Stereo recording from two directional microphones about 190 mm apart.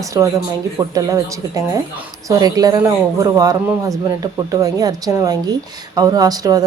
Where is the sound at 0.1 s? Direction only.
15° right (ahead or behind).